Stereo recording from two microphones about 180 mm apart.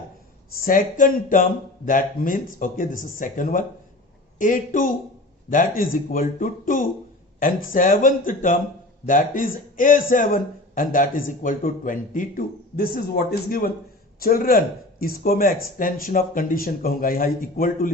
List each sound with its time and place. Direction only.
0.6 s speech: 50° left (ahead or behind)